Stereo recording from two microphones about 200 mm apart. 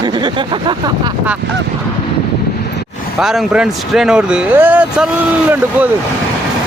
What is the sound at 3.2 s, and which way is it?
Speech, centre (ahead or behind).